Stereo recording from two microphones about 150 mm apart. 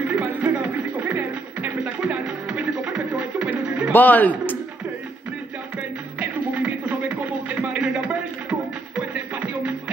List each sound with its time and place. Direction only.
0.0 s a sound: 10° right (ahead or behind)
3.9 s a man's voice: 10° left (ahead or behind)
6.1 s music: 10° right (ahead or behind)